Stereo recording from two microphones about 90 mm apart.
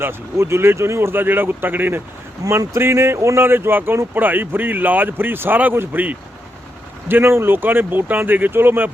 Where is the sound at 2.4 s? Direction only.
35° right (ahead or behind).